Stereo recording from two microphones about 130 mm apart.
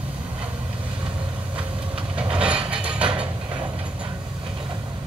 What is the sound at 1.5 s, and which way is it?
Vehicle, 10° right (ahead or behind).